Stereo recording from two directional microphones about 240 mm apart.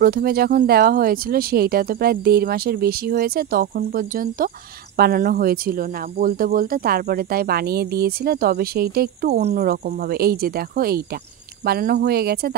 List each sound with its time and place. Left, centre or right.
0.0 s speech: right